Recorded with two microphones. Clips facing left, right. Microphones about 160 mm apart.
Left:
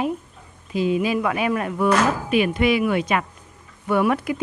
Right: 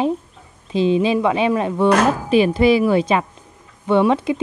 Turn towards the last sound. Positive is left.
turn(degrees=-25)  # may be behind; listen again after turning